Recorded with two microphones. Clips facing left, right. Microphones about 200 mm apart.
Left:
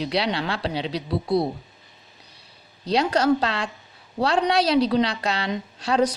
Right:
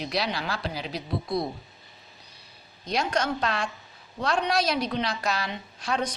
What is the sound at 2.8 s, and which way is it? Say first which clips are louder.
A woman's voice: left 7 dB; 35° left (ahead or behind).